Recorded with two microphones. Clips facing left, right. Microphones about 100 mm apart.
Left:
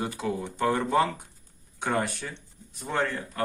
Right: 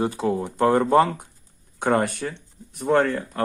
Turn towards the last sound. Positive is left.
turn(degrees=-55)  # may be behind; listen again after turning